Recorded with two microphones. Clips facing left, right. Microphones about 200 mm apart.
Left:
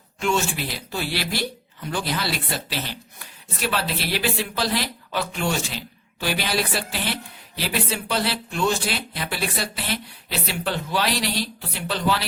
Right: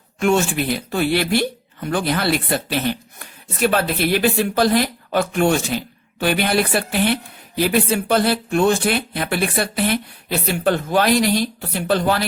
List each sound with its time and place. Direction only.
0.2 s speech: 55° right (ahead or behind)